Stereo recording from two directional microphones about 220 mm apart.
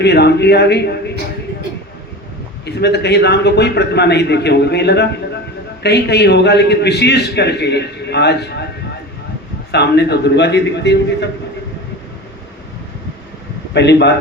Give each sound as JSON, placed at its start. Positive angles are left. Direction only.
{"t": 0.0, "sound": "a man's voice", "side_deg": 50}
{"t": 2.6, "sound": "a man's voice", "side_deg": 50}
{"t": 9.7, "sound": "a man's voice", "side_deg": 50}
{"t": 13.7, "sound": "a man's voice", "side_deg": 50}